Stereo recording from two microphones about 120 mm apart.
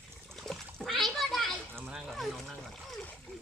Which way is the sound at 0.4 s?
5° left (ahead or behind).